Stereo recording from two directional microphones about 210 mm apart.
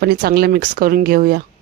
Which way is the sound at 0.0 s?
45° right (ahead or behind).